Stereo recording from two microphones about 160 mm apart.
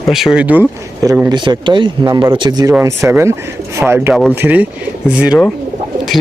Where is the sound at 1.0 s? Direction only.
20° right (ahead or behind).